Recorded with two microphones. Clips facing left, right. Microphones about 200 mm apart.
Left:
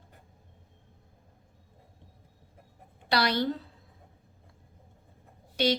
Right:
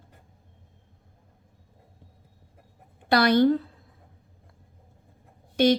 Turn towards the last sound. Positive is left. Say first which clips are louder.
# right 7 dB
turn(degrees=-50)  # may be behind; listen again after turning